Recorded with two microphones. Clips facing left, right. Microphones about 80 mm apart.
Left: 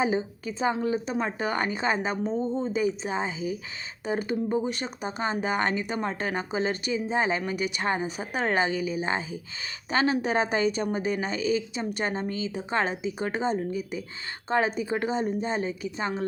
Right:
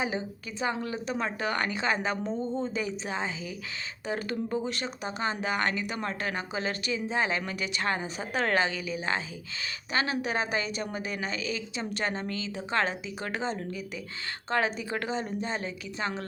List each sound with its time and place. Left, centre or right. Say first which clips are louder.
0.0 s speech: left 6 dB; left
2.2 s speech: left 3 dB; centre
2.7 s speech: left 5 dB; centre
9.9 s a woman's voice: left 5 dB; left